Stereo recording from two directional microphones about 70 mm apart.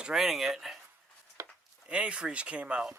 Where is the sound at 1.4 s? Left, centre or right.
Right.